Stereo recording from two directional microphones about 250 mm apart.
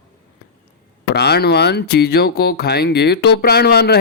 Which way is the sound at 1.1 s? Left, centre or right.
Left.